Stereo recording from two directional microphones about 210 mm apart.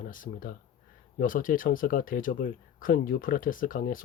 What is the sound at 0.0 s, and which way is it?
Speech, 40° left (ahead or behind).